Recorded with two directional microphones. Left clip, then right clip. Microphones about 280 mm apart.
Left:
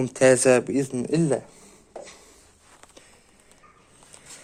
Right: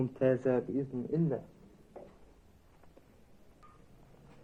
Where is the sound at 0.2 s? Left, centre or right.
Left.